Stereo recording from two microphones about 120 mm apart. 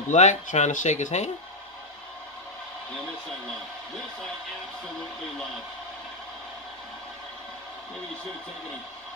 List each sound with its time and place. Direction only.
0.1 s speech: 85° left